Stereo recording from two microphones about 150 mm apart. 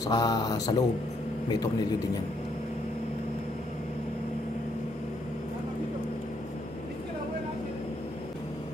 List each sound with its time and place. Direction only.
0.0 s speech: 25° left (ahead or behind)